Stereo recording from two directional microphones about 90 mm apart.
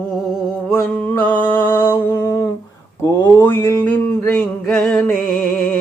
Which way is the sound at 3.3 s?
25° left (ahead or behind).